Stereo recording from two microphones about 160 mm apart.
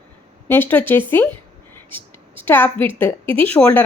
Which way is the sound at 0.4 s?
15° left (ahead or behind).